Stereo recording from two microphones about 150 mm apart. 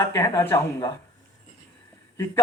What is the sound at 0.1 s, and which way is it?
Speech, 20° left (ahead or behind).